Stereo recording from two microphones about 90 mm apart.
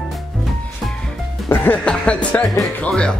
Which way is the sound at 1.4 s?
20° left (ahead or behind).